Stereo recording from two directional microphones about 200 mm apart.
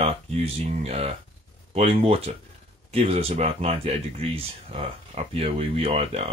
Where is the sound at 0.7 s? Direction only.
30° right (ahead or behind).